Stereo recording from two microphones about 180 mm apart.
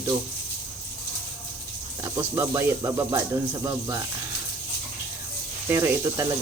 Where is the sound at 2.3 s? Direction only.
15° right (ahead or behind).